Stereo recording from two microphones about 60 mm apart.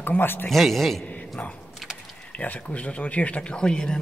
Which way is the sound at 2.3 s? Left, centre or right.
Left.